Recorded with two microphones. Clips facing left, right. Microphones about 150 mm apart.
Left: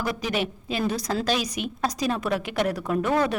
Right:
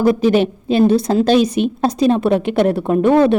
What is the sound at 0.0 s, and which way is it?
A woman's voice, 30° right (ahead or behind).